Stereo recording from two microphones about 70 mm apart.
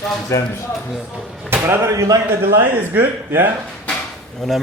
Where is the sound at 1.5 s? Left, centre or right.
Right.